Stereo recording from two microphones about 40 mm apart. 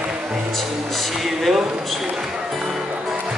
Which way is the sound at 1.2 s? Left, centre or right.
Centre.